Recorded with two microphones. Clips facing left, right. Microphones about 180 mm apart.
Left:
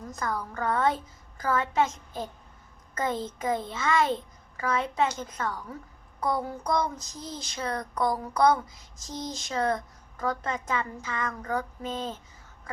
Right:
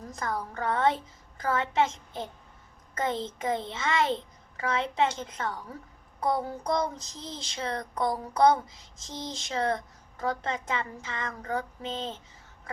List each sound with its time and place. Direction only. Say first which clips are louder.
0.2 s speech: left 1 dB; 25° right (ahead or behind)